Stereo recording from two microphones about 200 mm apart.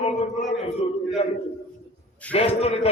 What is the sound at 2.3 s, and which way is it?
Speech, 30° left (ahead or behind).